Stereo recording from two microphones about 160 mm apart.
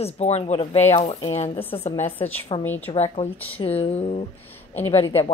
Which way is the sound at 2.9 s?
45° left (ahead or behind).